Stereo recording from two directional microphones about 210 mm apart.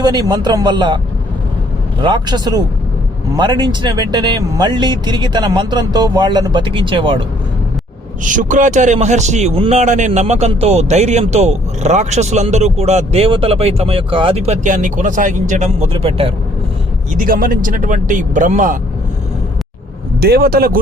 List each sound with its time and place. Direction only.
0.0 s speech: 20° right (ahead or behind)
2.0 s speech: 20° right (ahead or behind)
8.2 s a man's voice: 40° right (ahead or behind)
17.2 s a man's voice: 40° right (ahead or behind)
20.2 s speech: 45° right (ahead or behind)